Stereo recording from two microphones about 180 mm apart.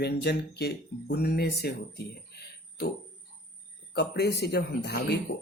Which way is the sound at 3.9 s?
65° left (ahead or behind).